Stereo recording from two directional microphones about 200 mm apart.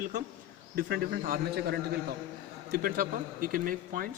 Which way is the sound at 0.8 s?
55° right (ahead or behind).